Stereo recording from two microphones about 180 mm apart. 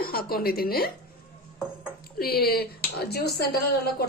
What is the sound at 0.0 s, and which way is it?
Speech, 55° left (ahead or behind).